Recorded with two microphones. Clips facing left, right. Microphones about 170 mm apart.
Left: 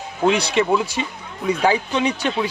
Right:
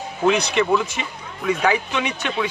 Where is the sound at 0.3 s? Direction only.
30° left (ahead or behind).